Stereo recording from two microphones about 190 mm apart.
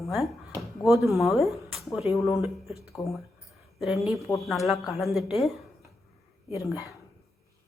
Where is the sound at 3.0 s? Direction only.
15° left (ahead or behind).